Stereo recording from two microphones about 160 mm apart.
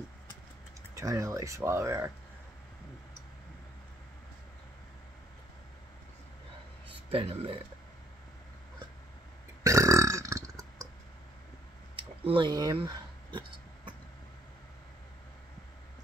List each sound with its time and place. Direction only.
0.9 s speech: 20° right (ahead or behind)
7.1 s speech: 35° right (ahead or behind)
9.6 s burping: 20° right (ahead or behind)
12.3 s speech: 30° right (ahead or behind)